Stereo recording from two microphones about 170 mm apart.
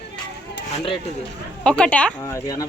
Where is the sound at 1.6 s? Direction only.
5° left (ahead or behind).